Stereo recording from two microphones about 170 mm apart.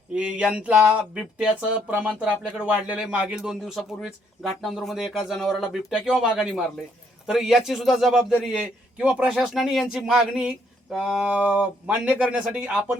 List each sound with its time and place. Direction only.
0.1 s speech: 5° right (ahead or behind)